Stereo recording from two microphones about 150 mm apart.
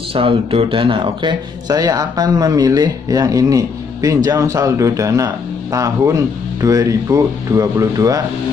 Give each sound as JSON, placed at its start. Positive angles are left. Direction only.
{"t": 0.1, "sound": "speech", "side_deg": -35}